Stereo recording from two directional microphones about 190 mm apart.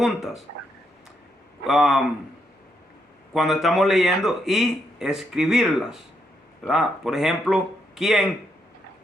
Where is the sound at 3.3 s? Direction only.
Centre (ahead or behind).